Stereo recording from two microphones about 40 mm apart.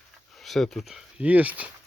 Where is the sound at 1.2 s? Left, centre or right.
Right.